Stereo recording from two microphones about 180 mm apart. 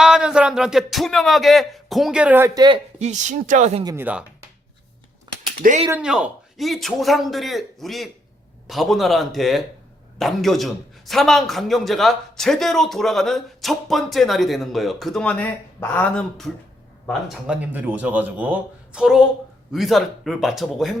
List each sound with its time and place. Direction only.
0.0 s speech: 5° right (ahead or behind)
2.6 s speech: 25° right (ahead or behind)
3.0 s speech: 40° right (ahead or behind)
3.8 s speech: 10° right (ahead or behind)
5.3 s typing: 25° right (ahead or behind)
5.6 s speech: 40° right (ahead or behind)
5.9 s a man's voice: 5° right (ahead or behind)
17.1 s a man's voice: 5° right (ahead or behind)